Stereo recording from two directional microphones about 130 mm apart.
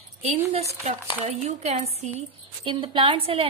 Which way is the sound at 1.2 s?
70° right (ahead or behind).